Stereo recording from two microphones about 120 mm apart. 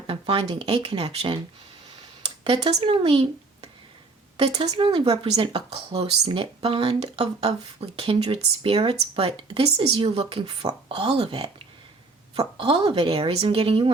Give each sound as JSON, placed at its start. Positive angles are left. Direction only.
{"t": 0.1, "sound": "speech", "side_deg": -50}
{"t": 2.4, "sound": "speech", "side_deg": -50}
{"t": 4.8, "sound": "speech", "side_deg": -40}
{"t": 5.1, "sound": "speech", "side_deg": -65}
{"t": 5.4, "sound": "speech", "side_deg": -40}
{"t": 5.7, "sound": "speech", "side_deg": -55}